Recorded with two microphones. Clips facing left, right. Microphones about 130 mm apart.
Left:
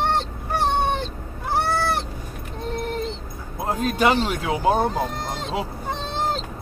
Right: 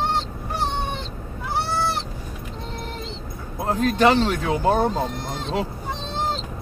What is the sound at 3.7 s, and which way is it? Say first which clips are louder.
Speech: right 2 dB; 10° left (ahead or behind).